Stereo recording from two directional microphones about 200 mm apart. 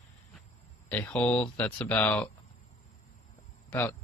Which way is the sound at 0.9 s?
5° left (ahead or behind).